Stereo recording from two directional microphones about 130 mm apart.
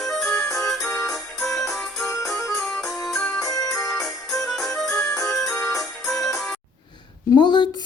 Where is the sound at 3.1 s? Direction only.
5° left (ahead or behind).